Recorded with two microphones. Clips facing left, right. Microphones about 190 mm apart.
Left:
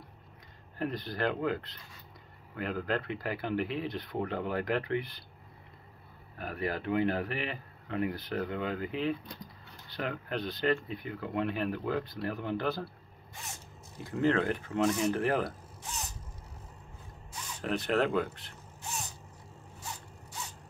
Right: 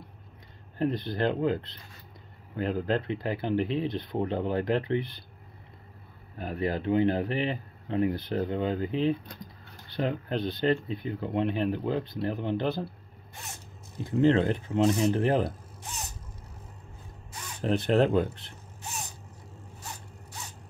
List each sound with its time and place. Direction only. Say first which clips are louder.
0.7 s speech: right 6 dB; 25° right (ahead or behind)
6.3 s speech: right 4 dB; 25° right (ahead or behind)
14.0 s speech: right 5 dB; 25° right (ahead or behind)
17.6 s speech: right 5 dB; 30° right (ahead or behind)